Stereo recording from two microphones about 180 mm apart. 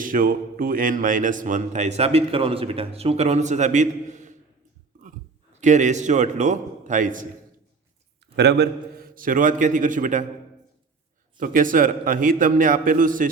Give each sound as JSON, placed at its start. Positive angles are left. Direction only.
{"t": 0.0, "sound": "a man's voice", "side_deg": -50}
{"t": 5.5, "sound": "a man's voice", "side_deg": -40}
{"t": 8.4, "sound": "a man's voice", "side_deg": -65}
{"t": 11.3, "sound": "a man's voice", "side_deg": -50}